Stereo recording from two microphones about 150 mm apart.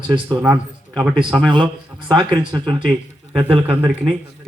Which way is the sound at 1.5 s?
30° right (ahead or behind).